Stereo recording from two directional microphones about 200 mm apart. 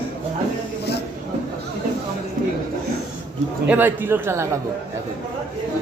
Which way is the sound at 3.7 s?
10° right (ahead or behind).